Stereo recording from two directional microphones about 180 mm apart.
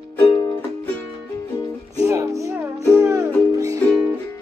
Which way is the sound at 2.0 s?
15° right (ahead or behind).